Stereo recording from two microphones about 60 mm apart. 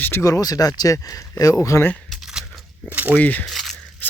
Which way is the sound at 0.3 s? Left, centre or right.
Left.